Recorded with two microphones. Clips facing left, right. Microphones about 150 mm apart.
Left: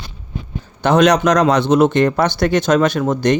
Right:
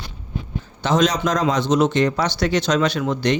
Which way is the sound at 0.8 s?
65° left (ahead or behind).